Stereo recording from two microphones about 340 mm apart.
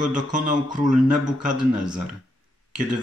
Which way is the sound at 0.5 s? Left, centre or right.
Centre.